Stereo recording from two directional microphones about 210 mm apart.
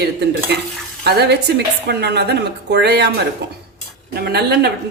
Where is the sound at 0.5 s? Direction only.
55° right (ahead or behind).